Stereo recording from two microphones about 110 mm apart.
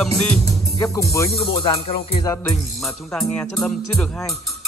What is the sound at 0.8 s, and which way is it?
Speech, 30° left (ahead or behind).